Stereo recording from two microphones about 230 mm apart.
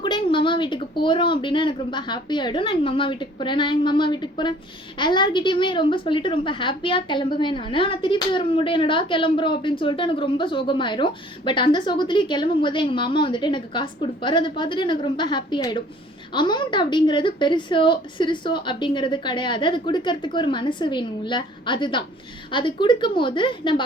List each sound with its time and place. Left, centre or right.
0.0 s a woman's voice: left